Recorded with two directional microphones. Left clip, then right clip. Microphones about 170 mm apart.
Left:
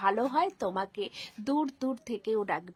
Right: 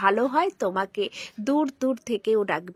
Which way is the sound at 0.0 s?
15° right (ahead or behind).